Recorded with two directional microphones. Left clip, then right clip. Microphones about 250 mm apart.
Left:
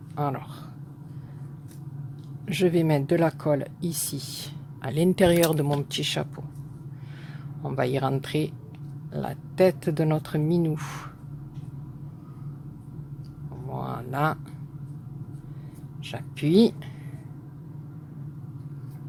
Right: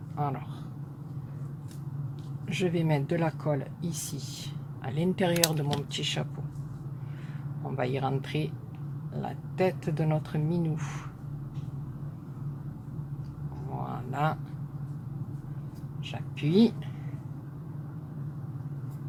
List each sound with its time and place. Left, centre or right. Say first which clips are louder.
0.2 s speech: left 4 dB; left
2.5 s speech: left 6 dB; left
7.6 s speech: left 5 dB; left
13.7 s a sound: left 4 dB; left
16.0 s speech: left 6 dB; left